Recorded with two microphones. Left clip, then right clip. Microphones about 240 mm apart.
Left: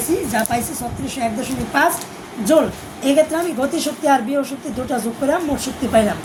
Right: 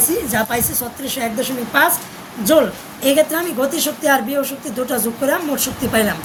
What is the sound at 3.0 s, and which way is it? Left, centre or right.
A woman's voice, right.